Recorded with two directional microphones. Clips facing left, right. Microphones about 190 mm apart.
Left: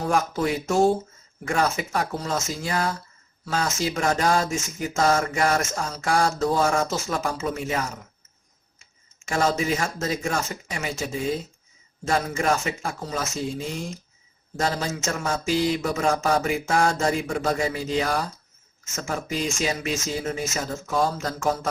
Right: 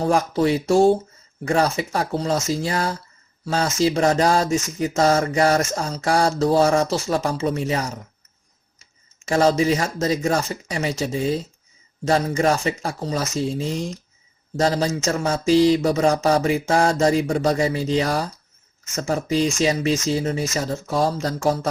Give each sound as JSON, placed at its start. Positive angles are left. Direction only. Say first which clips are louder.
{"t": 0.0, "sound": "speech", "louder": "right 5 dB", "side_deg": -30}
{"t": 9.2, "sound": "speech", "louder": "right 6 dB", "side_deg": -35}